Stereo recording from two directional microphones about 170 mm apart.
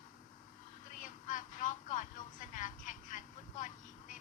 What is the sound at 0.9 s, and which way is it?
Vehicle, 50° left (ahead or behind).